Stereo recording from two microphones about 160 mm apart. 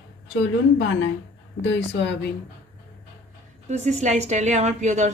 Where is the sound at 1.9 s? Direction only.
90° left.